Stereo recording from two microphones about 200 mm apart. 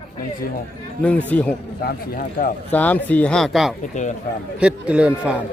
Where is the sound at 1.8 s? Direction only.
45° left (ahead or behind).